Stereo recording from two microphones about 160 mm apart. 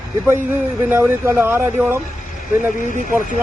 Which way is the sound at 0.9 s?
15° right (ahead or behind).